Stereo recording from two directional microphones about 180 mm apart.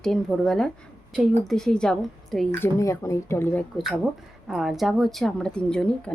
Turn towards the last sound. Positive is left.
turn(degrees=5)  # may be behind; listen again after turning